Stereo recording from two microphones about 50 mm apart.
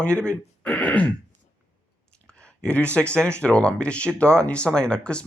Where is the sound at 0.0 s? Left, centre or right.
Left.